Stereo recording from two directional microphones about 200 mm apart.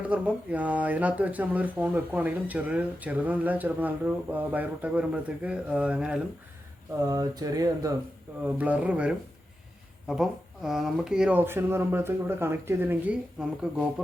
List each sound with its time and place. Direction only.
0.0 s speech: 5° right (ahead or behind)
7.0 s speech: 20° right (ahead or behind)